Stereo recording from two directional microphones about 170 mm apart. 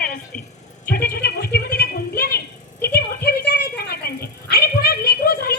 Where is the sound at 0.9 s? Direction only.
60° left (ahead or behind).